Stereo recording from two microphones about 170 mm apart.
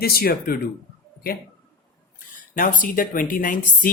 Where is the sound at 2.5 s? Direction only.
50° left (ahead or behind).